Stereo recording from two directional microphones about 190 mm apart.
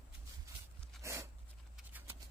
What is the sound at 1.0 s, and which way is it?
Dog, 15° right (ahead or behind).